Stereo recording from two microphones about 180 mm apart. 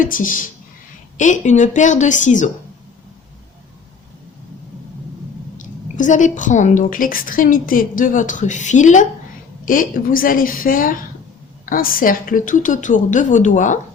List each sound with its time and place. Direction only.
0.0 s a woman's voice: 50° left (ahead or behind)
5.5 s a woman's voice: 45° left (ahead or behind)